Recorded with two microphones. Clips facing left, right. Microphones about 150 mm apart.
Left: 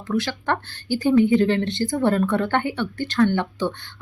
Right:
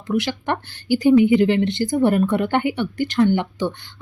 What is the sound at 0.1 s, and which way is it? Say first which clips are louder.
Speech: right 2 dB; 20° right (ahead or behind).